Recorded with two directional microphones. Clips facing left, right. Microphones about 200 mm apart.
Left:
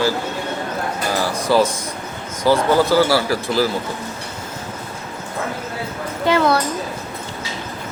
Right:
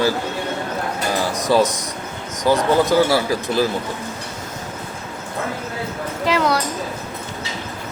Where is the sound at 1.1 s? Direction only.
20° right (ahead or behind).